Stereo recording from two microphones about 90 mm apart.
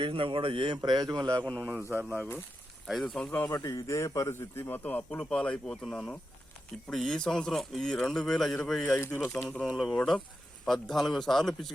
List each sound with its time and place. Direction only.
0.0 s speech: 75° right (ahead or behind)
0.9 s speech: 50° right (ahead or behind)
1.6 s a man's voice: 25° right (ahead or behind)
2.8 s a man's voice: centre (ahead or behind)
3.5 s a man's voice: 40° left (ahead or behind); by 8.8 s 5° left (ahead or behind)
9.0 s speech: 25° left (ahead or behind)
9.6 s a man's voice: centre (ahead or behind)